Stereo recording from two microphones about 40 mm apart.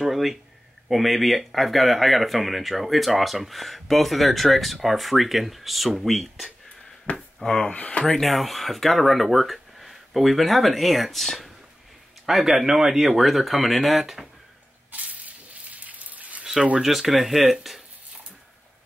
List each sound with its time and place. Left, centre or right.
0.0 s speech: centre
7.1 s speech: left
7.4 s speech: centre
7.7 s speech: left
8.2 s speech: centre
14.9 s a sound: right
16.8 s speech: centre